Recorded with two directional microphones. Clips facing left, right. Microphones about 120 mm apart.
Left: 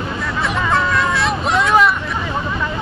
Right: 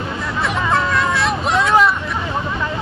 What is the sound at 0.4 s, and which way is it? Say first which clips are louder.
Hubbub: even; centre (ahead or behind).